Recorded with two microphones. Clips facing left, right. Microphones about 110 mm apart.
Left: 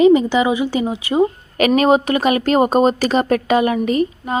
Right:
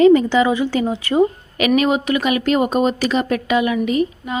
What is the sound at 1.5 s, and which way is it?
A woman's voice, 40° left (ahead or behind).